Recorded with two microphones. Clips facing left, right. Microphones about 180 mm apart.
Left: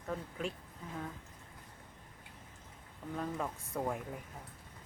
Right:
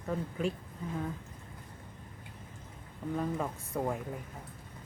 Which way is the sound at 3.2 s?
5° right (ahead or behind).